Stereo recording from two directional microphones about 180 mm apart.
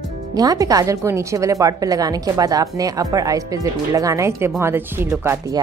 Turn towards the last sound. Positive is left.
turn(degrees=-20)  # may be behind; listen again after turning